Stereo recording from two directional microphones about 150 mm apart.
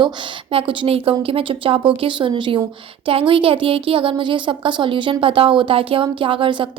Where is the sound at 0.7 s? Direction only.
35° right (ahead or behind).